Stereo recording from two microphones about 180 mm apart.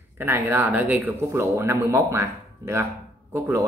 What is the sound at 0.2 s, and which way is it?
Speech, 10° right (ahead or behind).